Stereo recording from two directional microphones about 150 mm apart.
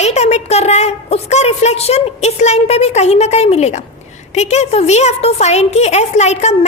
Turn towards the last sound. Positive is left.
turn(degrees=45)  # may be behind; listen again after turning